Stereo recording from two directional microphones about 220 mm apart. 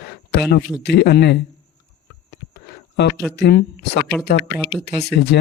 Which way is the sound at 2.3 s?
50° left (ahead or behind).